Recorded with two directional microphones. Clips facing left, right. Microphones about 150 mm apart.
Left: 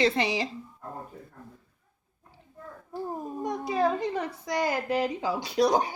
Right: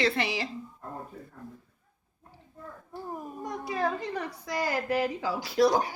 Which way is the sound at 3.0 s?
25° left (ahead or behind).